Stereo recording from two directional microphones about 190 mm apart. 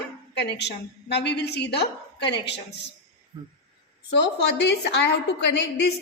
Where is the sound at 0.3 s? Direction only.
65° left (ahead or behind).